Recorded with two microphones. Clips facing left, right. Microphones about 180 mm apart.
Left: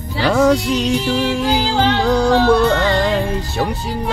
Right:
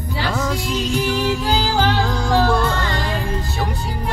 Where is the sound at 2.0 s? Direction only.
70° left (ahead or behind).